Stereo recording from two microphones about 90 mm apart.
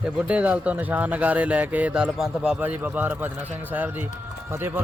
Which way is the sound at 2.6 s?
20° right (ahead or behind).